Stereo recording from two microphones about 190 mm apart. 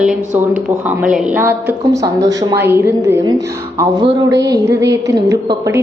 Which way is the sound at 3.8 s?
25° right (ahead or behind).